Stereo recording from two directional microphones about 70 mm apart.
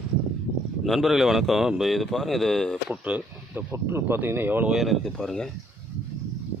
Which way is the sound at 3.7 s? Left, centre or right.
Right.